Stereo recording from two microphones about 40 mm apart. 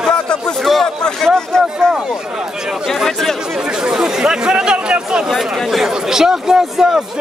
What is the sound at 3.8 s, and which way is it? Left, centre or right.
Speech, centre.